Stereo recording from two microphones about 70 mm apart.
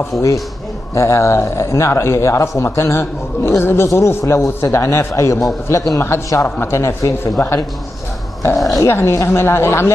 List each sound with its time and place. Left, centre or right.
0.9 s speech: left
8.7 s speech: left